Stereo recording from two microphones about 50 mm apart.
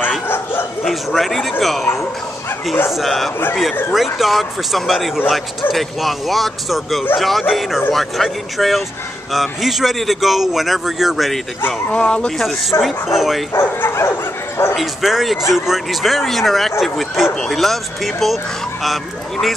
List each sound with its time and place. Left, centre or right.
0.3 s bow-wow: left
0.8 s speech: centre
2.9 s speech: centre
11.9 s speech: left
12.8 s speech: centre
13.7 s bow-wow: left
14.8 s speech: centre